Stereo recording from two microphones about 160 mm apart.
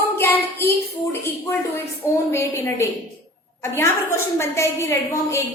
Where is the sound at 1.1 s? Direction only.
15° left (ahead or behind).